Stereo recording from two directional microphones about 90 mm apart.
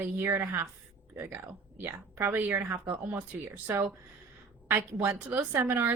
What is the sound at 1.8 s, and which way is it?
Speech, 25° right (ahead or behind).